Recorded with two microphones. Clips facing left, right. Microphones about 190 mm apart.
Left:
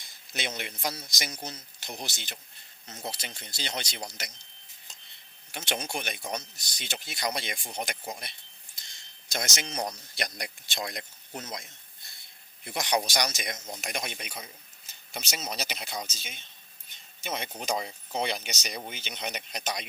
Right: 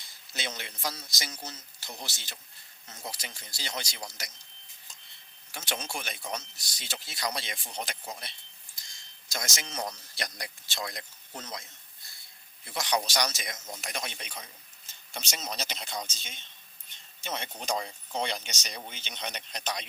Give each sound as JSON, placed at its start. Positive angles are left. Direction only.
{"t": 0.3, "sound": "speech", "side_deg": 15}
{"t": 5.5, "sound": "speech", "side_deg": 20}
{"t": 12.6, "sound": "speech", "side_deg": 15}